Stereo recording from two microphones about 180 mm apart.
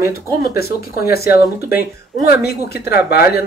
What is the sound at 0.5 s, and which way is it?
Speech, 60° left (ahead or behind).